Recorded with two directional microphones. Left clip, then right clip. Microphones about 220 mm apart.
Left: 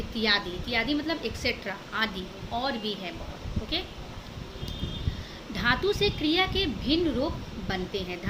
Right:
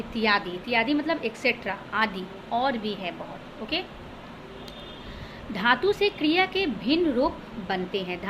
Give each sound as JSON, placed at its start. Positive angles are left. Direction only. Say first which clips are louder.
{"t": 0.2, "sound": "a woman's voice", "louder": "right 2 dB", "side_deg": 15}
{"t": 5.5, "sound": "a woman's voice", "louder": "right 3 dB", "side_deg": 15}